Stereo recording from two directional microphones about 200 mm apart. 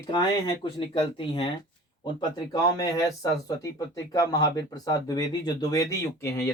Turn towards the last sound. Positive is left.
turn(degrees=15)  # may be behind; listen again after turning